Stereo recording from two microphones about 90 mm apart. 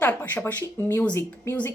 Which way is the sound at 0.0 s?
20° left (ahead or behind).